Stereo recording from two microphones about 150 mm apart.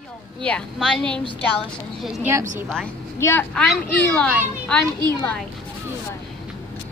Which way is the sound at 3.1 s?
15° left (ahead or behind).